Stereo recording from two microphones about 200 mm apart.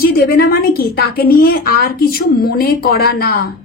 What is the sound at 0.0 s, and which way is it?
A woman's voice, 50° left (ahead or behind).